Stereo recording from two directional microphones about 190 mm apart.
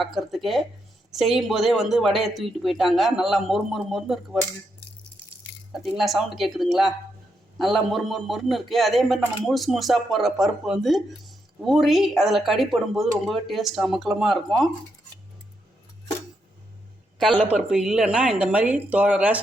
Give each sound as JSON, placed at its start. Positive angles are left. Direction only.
{"t": 0.0, "sound": "speech", "side_deg": 0}
{"t": 5.7, "sound": "speech", "side_deg": 0}
{"t": 17.2, "sound": "speech", "side_deg": 0}